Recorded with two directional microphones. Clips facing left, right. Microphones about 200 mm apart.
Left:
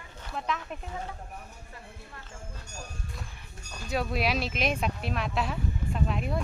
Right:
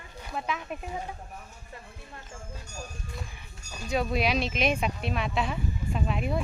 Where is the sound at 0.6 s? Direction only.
15° right (ahead or behind).